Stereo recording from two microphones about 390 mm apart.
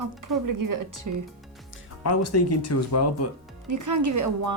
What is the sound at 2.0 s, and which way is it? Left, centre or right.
Speech, left.